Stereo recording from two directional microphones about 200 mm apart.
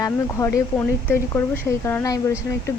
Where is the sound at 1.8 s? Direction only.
15° left (ahead or behind).